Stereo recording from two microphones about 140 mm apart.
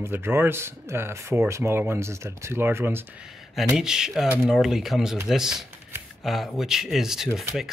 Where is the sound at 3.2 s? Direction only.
Centre (ahead or behind).